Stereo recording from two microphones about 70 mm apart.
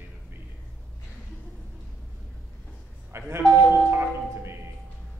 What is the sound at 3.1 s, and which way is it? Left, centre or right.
Speech, right.